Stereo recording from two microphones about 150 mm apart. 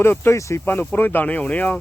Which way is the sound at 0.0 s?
15° left (ahead or behind).